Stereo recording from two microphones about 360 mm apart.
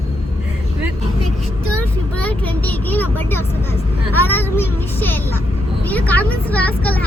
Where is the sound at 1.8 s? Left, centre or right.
Centre.